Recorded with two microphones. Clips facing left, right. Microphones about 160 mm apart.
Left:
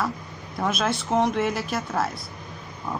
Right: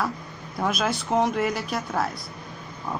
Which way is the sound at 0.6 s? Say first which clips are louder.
Even; centre (ahead or behind).